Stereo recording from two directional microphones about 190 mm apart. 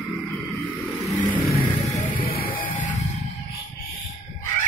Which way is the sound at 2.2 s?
50° left (ahead or behind).